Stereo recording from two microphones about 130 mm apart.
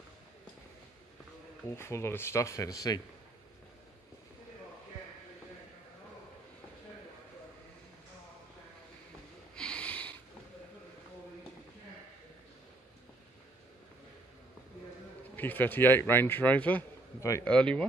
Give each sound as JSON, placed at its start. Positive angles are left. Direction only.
{"t": 1.7, "sound": "speech", "side_deg": 20}
{"t": 9.6, "sound": "snort", "side_deg": 10}
{"t": 15.3, "sound": "a man's voice", "side_deg": 15}